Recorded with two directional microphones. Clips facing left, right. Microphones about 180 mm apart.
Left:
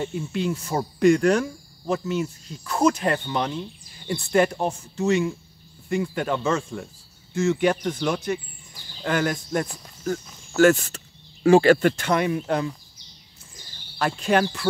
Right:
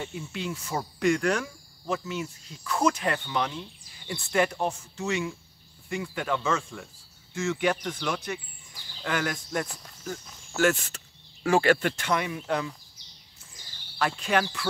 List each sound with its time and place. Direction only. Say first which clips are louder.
0.0 s speech: left 8 dB; 40° left (ahead or behind)
11.4 s speech: left 8 dB; 25° left (ahead or behind)
11.7 s speech: left 6 dB; 40° left (ahead or behind)
13.9 s speech: left 5 dB; 40° left (ahead or behind)